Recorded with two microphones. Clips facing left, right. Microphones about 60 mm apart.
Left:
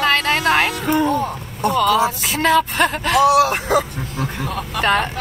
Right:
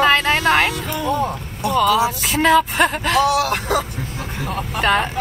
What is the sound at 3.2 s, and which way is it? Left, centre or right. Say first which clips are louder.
Speech: left 4 dB; centre.